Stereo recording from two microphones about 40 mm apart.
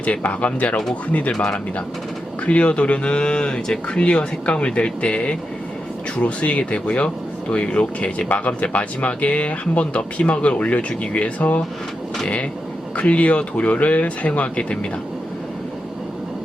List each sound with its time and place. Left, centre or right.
0.0 s speech: left
2.5 s speech: left
13.0 s speech: left